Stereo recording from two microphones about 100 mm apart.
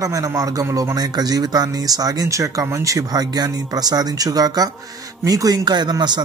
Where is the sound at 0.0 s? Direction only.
35° right (ahead or behind).